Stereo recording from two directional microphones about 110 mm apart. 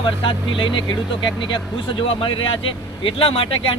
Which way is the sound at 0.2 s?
50° left (ahead or behind).